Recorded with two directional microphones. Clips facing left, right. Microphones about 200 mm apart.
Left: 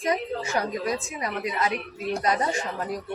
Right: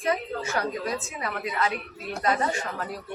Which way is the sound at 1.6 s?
20° left (ahead or behind).